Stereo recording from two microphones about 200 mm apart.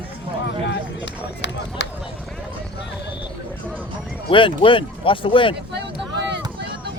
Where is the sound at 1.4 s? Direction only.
60° left (ahead or behind).